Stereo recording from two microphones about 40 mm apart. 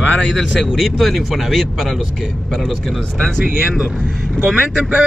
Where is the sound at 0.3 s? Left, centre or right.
Centre.